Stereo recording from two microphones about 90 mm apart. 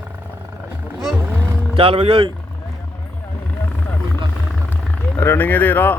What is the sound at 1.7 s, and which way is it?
Speech, 90° right.